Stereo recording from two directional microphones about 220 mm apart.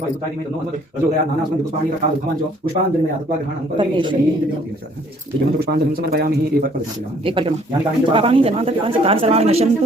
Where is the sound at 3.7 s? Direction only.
20° right (ahead or behind).